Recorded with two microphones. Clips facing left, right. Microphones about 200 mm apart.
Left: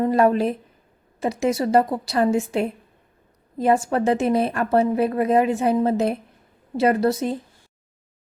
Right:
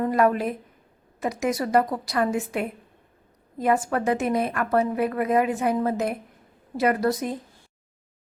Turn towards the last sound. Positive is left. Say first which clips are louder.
# left 3 dB
turn(degrees=25)  # may be behind; listen again after turning